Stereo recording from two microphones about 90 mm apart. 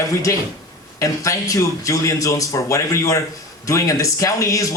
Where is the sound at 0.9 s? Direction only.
35° left (ahead or behind).